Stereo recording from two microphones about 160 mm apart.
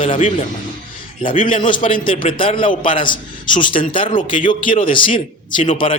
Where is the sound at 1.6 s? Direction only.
30° left (ahead or behind).